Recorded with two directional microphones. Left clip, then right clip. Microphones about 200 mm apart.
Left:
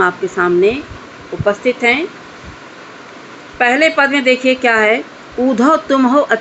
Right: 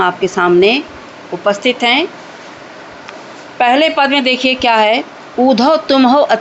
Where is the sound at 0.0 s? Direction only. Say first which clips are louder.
Right 1 dB; 20° right (ahead or behind).